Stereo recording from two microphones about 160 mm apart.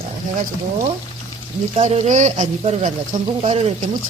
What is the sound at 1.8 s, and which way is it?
Speech, 45° right (ahead or behind).